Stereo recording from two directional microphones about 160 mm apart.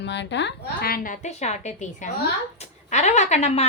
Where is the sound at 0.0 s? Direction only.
90° left.